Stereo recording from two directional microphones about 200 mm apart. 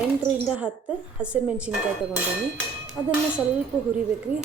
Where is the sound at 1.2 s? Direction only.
5° right (ahead or behind).